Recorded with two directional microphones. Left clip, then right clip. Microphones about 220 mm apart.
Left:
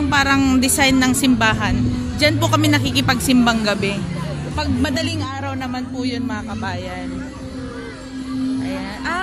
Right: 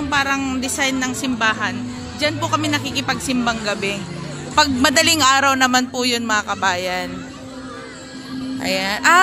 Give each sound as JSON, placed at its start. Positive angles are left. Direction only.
{"t": 0.1, "sound": "a woman's voice", "side_deg": 5}
{"t": 4.6, "sound": "a man's voice", "side_deg": -25}
{"t": 8.6, "sound": "speech", "side_deg": -30}